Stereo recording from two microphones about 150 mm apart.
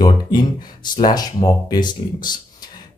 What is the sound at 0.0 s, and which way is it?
Speech, 30° left (ahead or behind).